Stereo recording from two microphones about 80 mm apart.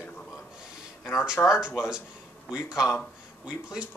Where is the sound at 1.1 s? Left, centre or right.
Centre.